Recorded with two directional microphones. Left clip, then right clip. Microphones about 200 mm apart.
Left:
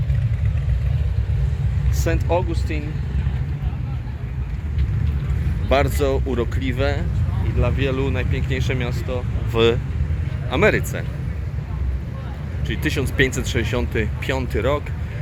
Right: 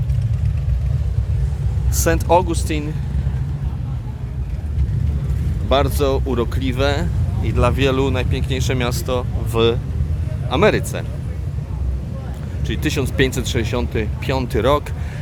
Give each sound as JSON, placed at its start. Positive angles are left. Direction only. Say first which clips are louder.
{"t": 2.0, "sound": "speech", "louder": "right 7 dB", "side_deg": -20}
{"t": 5.6, "sound": "speech", "louder": "right 2 dB", "side_deg": -5}
{"t": 7.4, "sound": "speech", "louder": "right 6 dB", "side_deg": -25}
{"t": 8.8, "sound": "speech", "louder": "right 6 dB", "side_deg": -25}
{"t": 9.5, "sound": "speech", "louder": "even", "side_deg": 0}
{"t": 12.6, "sound": "speech", "louder": "right 2 dB", "side_deg": -10}